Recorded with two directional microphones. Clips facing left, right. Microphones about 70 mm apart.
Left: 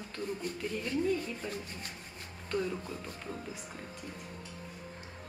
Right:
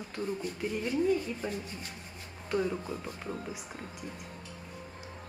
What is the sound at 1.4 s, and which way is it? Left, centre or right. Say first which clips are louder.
Speech: right 4 dB; right.